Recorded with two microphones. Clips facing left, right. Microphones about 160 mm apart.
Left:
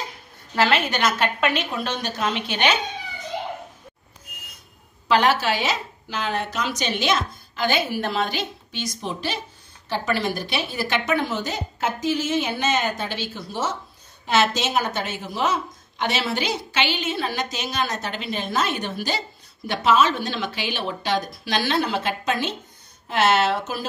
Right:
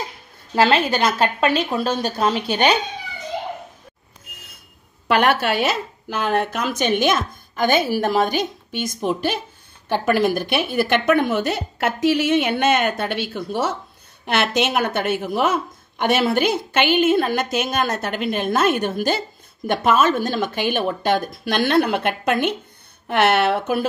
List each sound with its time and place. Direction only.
0.6 s a woman's voice: 35° right (ahead or behind)
5.0 s a woman's voice: 60° right (ahead or behind)